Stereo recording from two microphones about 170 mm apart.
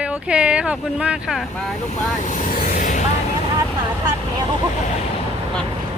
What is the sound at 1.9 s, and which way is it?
Vehicle, 45° left (ahead or behind).